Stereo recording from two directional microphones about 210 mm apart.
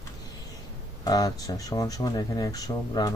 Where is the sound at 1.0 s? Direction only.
20° left (ahead or behind).